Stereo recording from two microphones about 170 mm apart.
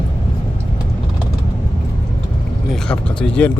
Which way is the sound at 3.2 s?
5° left (ahead or behind).